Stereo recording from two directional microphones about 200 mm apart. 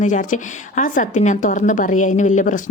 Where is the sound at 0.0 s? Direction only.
40° left (ahead or behind).